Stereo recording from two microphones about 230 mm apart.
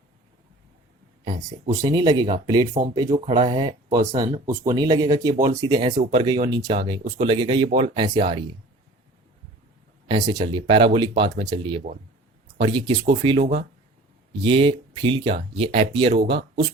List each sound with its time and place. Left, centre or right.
1.2 s speech: centre
10.1 s speech: centre